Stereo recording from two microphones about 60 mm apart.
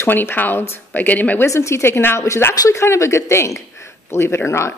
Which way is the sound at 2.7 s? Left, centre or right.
Left.